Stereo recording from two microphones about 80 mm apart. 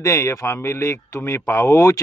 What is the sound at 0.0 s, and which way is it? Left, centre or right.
Speech, left.